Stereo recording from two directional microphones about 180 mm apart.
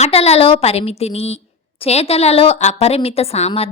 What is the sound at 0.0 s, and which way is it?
A woman's voice, 35° left (ahead or behind).